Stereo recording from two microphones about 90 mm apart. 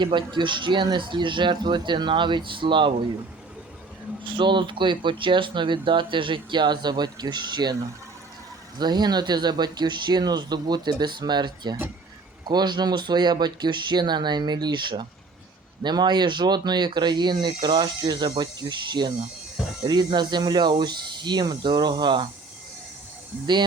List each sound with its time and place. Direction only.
0.0 s speech: 60° right (ahead or behind)
4.3 s speech: 65° right (ahead or behind)
8.8 s speech: 50° right (ahead or behind)